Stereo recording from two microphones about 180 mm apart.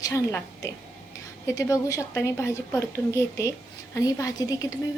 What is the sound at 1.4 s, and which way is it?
A woman's voice, 15° left (ahead or behind).